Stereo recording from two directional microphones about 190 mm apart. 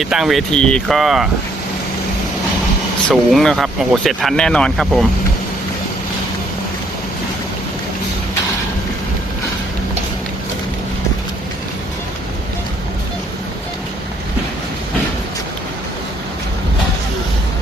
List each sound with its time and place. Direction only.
0.0 s speech: centre (ahead or behind)
3.1 s speech: 5° left (ahead or behind)